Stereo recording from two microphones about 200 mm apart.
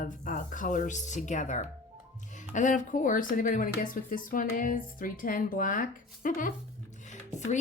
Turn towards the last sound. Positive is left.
turn(degrees=35)  # may be behind; listen again after turning